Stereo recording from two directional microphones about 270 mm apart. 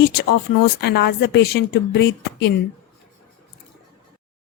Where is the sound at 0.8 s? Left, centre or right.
Left.